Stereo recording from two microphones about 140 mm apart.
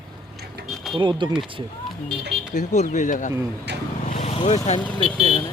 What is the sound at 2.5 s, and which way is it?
Speech, 60° left (ahead or behind).